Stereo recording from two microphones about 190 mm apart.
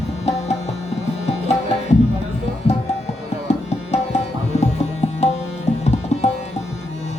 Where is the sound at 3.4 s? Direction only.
35° left (ahead or behind).